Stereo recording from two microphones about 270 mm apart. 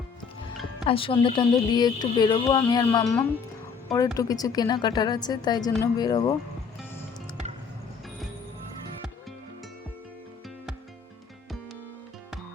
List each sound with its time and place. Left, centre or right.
0.9 s speech: centre